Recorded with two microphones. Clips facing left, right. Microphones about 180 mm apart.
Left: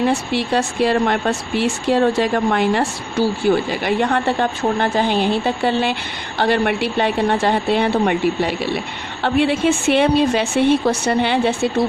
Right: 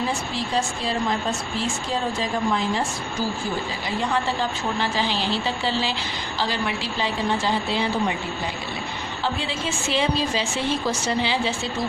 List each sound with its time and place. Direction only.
0.0 s speech: 70° left (ahead or behind)